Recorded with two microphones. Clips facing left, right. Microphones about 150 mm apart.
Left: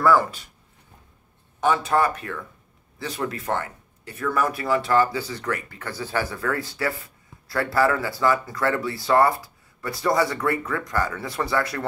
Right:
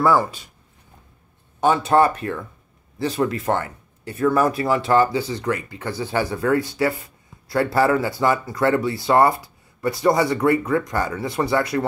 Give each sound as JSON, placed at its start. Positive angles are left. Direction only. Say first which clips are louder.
{"t": 1.6, "sound": "speech", "louder": "right 4 dB", "side_deg": -25}